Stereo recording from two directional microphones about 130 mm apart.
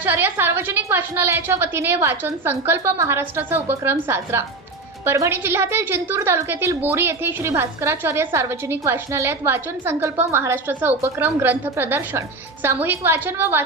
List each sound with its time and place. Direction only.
0.0 s a woman's voice: 15° right (ahead or behind)